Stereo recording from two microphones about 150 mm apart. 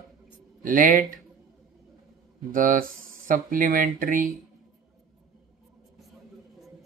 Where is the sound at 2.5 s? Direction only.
70° right (ahead or behind).